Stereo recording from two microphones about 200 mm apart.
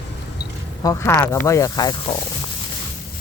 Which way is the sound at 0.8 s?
15° left (ahead or behind).